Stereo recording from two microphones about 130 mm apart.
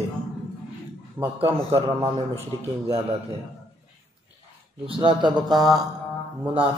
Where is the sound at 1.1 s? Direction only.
20° right (ahead or behind).